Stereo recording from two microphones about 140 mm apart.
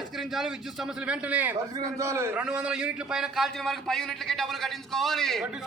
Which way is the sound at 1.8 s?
20° right (ahead or behind).